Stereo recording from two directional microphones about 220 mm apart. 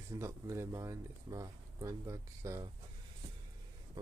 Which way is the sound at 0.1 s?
15° right (ahead or behind).